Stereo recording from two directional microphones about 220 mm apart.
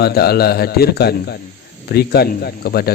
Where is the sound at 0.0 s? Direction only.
45° left (ahead or behind).